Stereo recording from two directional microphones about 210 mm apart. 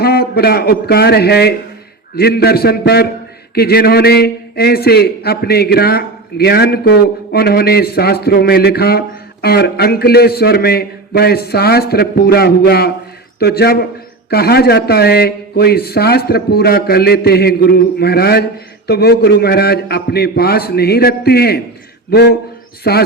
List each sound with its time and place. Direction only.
0.0 s a man's voice: 50° left (ahead or behind)